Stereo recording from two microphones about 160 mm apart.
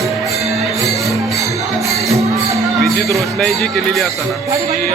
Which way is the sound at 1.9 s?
20° right (ahead or behind).